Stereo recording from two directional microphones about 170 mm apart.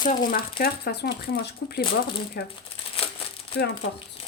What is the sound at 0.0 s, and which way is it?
Speech, 55° left (ahead or behind).